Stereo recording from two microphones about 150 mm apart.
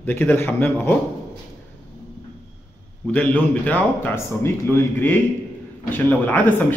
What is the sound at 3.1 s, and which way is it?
Speech, 10° left (ahead or behind).